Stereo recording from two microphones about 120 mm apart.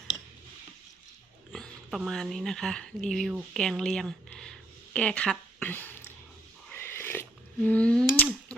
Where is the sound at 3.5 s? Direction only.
5° left (ahead or behind).